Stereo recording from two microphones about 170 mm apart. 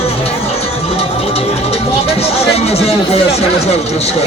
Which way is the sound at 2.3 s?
35° left (ahead or behind).